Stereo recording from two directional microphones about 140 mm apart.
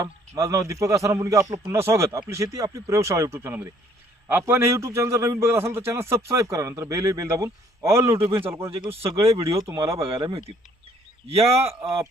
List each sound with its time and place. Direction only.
0.0 s a man's voice: 25° right (ahead or behind)
8.7 s speech: 45° right (ahead or behind)
9.4 s a man's voice: 20° right (ahead or behind)
9.8 s speech: 40° right (ahead or behind)